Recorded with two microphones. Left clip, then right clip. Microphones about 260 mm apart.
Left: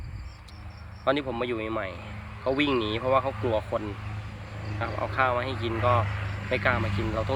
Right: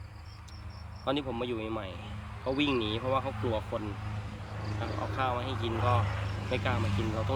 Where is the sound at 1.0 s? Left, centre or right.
Centre.